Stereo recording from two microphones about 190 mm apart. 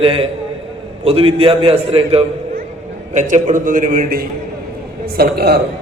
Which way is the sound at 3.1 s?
40° right (ahead or behind).